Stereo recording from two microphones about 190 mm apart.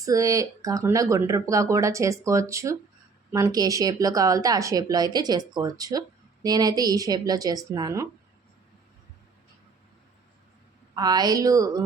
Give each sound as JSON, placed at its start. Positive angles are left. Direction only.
{"t": 0.0, "sound": "speech", "side_deg": -20}
{"t": 10.9, "sound": "speech", "side_deg": -20}